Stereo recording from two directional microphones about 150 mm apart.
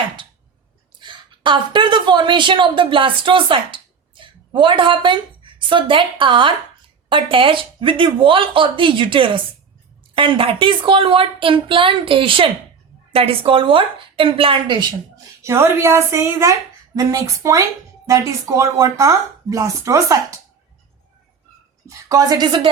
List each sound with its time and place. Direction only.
0.9 s a woman's voice: 30° right (ahead or behind)
21.8 s a woman's voice: 25° right (ahead or behind)